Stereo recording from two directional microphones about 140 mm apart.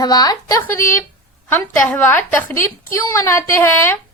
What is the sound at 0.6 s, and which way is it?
A woman's voice, 15° left (ahead or behind).